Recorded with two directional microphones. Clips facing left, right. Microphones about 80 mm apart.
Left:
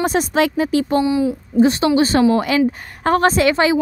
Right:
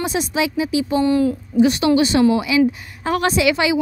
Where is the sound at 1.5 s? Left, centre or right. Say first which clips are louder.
Left 1 dB; left.